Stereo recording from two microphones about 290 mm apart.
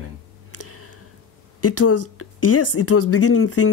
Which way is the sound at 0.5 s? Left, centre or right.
Left.